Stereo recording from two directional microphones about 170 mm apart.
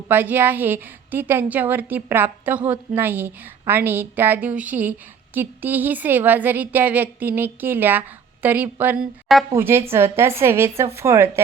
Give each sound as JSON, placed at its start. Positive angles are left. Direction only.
{"t": 0.1, "sound": "a woman's voice", "side_deg": -10}